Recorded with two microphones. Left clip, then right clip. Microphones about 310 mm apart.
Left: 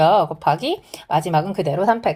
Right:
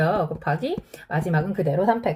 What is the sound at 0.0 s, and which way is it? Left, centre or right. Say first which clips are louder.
A woman's voice: left 8 dB; centre.